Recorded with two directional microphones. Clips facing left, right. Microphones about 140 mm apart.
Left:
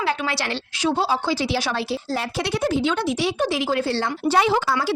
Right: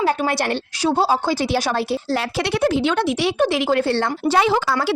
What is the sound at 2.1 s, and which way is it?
Speech, 70° right (ahead or behind).